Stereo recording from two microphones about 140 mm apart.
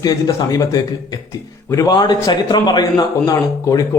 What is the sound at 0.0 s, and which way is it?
A man's voice, 25° left (ahead or behind).